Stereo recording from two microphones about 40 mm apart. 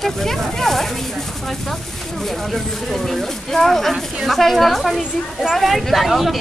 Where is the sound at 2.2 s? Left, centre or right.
Centre.